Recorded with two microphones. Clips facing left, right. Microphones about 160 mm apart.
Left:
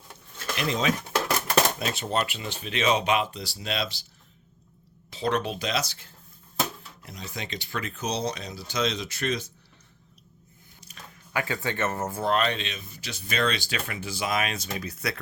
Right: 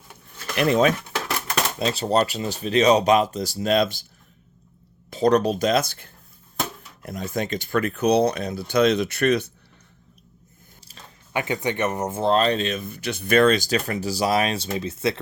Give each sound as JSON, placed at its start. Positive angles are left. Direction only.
{"t": 0.5, "sound": "speech", "side_deg": -55}
{"t": 1.8, "sound": "speech", "side_deg": -35}
{"t": 5.1, "sound": "speech", "side_deg": -40}
{"t": 10.8, "sound": "speech", "side_deg": -30}